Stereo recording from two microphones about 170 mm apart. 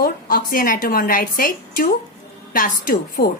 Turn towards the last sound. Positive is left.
turn(degrees=55)  # may be behind; listen again after turning